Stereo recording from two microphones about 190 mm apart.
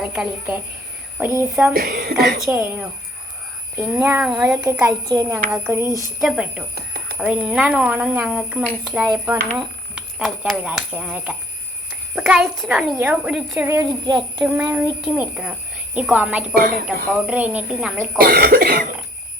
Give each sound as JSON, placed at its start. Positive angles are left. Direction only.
{"t": 0.0, "sound": "speech", "side_deg": -5}
{"t": 1.7, "sound": "speech", "side_deg": -50}
{"t": 2.5, "sound": "a woman's voice", "side_deg": -10}
{"t": 4.6, "sound": "speech", "side_deg": -15}
{"t": 5.5, "sound": "speech", "side_deg": -5}
{"t": 6.1, "sound": "a woman's voice", "side_deg": -5}
{"t": 6.7, "sound": "a sound", "side_deg": -60}
{"t": 7.2, "sound": "a woman's voice", "side_deg": -5}
{"t": 13.7, "sound": "speech", "side_deg": -15}
{"t": 16.6, "sound": "speech", "side_deg": -50}
{"t": 17.2, "sound": "speech", "side_deg": -5}
{"t": 18.2, "sound": "speech", "side_deg": -55}